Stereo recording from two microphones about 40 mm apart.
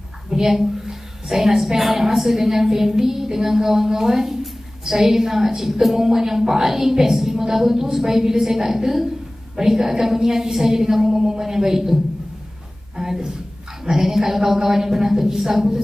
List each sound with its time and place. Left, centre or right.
0.3 s a woman's voice: centre